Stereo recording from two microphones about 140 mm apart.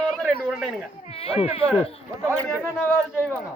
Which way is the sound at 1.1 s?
45° left (ahead or behind).